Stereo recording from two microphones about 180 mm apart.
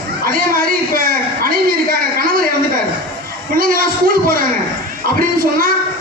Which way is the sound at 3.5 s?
50° right (ahead or behind).